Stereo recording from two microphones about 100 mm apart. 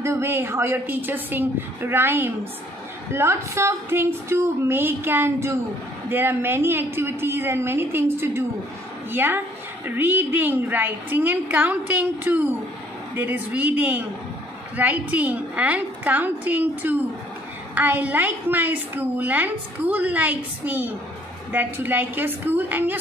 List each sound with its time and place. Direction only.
0.0 s a woman's voice: 25° right (ahead or behind)